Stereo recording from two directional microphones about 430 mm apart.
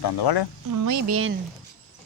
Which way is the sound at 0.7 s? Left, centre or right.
Right.